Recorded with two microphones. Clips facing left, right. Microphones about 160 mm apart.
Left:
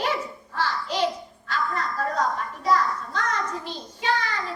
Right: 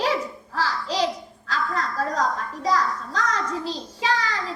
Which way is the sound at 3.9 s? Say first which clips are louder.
Even; 90° right.